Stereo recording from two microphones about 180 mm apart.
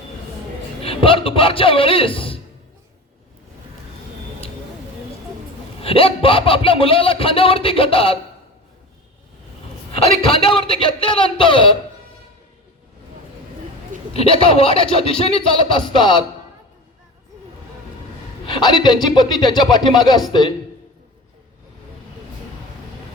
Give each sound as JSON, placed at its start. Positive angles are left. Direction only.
{"t": 0.8, "sound": "a man's voice", "side_deg": 30}
{"t": 5.8, "sound": "speech", "side_deg": 30}
{"t": 10.2, "sound": "a man's voice", "side_deg": 30}
{"t": 14.1, "sound": "speech", "side_deg": 30}
{"t": 18.4, "sound": "a woman's voice", "side_deg": 25}